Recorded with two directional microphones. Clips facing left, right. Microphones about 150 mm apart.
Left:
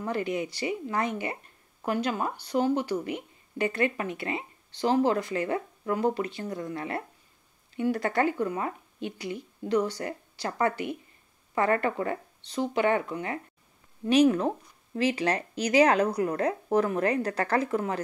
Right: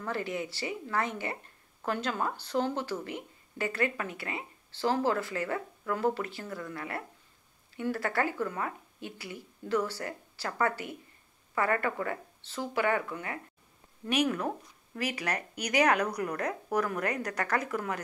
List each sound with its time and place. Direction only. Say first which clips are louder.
0.0 s a woman's voice: left 4 dB; 15° left (ahead or behind)